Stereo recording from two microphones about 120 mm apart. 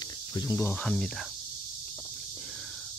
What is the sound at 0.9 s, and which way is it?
Speech, centre (ahead or behind).